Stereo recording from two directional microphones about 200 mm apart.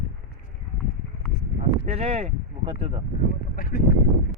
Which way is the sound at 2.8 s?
30° right (ahead or behind).